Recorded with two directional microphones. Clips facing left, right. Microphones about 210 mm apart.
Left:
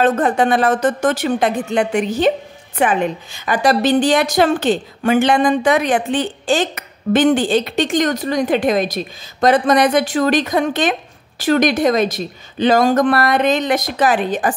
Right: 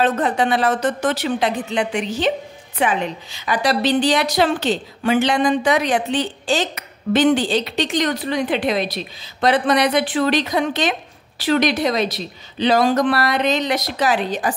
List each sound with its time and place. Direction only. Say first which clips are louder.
0.0 s a woman's voice: left 3 dB; 50° left (ahead or behind)